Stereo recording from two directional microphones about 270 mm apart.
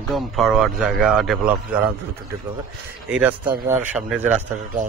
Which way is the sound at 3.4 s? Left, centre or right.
Right.